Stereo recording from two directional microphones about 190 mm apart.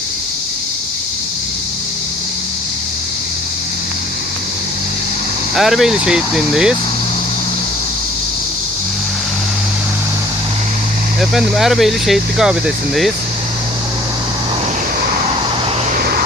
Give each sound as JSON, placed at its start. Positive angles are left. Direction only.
{"t": 5.5, "sound": "speech", "side_deg": 0}
{"t": 11.2, "sound": "speech", "side_deg": 0}
{"t": 16.0, "sound": "vehicle", "side_deg": -55}